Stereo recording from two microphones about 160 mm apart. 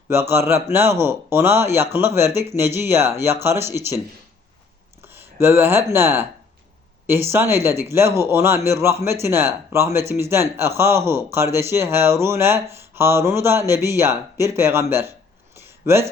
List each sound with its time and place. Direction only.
0.1 s speech: 15° right (ahead or behind)
5.0 s speech: 15° right (ahead or behind)